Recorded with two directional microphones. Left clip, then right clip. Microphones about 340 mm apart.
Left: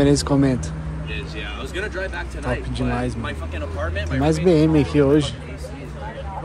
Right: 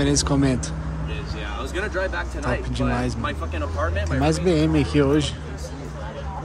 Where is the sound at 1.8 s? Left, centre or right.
Right.